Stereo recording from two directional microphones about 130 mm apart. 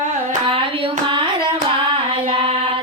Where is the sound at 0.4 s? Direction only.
40° right (ahead or behind).